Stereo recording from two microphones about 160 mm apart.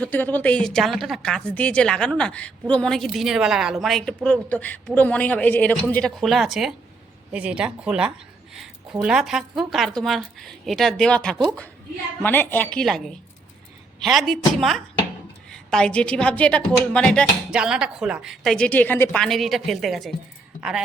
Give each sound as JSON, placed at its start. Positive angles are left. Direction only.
{"t": 0.0, "sound": "speech", "side_deg": 10}
{"t": 17.5, "sound": "speech", "side_deg": -5}